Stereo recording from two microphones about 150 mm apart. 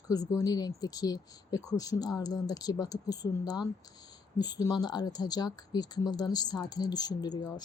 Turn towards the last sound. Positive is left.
turn(degrees=25)  # may be behind; listen again after turning